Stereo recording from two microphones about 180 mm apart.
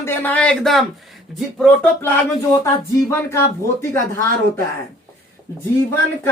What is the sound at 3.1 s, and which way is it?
Speech, 15° left (ahead or behind).